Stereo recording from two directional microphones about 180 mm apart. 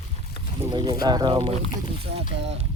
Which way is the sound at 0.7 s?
25° right (ahead or behind).